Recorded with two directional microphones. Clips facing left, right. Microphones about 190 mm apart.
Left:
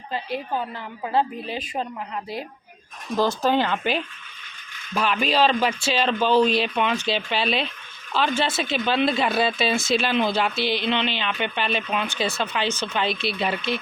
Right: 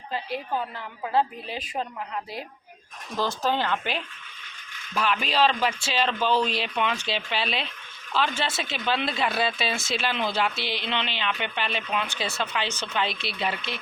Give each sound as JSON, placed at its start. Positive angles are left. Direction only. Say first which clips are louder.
{"t": 0.1, "sound": "a woman's voice", "louder": "left 2 dB", "side_deg": -5}
{"t": 3.2, "sound": "speech", "louder": "left 5 dB", "side_deg": 10}